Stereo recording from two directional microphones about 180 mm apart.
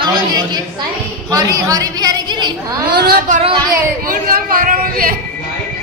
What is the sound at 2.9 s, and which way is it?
Speech, 60° right (ahead or behind).